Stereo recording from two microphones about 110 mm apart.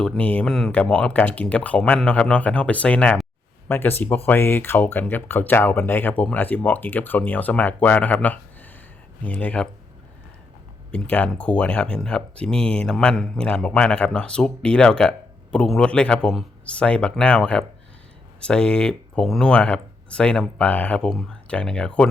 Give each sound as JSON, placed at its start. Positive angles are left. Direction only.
{"t": 0.0, "sound": "speech", "side_deg": 15}
{"t": 10.9, "sound": "speech", "side_deg": 10}